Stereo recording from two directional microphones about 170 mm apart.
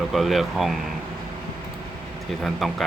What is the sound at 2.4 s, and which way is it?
Speech, centre (ahead or behind).